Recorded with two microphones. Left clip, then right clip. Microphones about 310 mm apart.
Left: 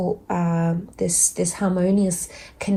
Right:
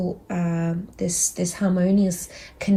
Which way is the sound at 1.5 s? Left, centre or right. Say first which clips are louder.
Right 1 dB; left.